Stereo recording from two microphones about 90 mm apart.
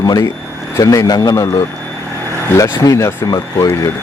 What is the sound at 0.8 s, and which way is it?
Speech, 40° left (ahead or behind).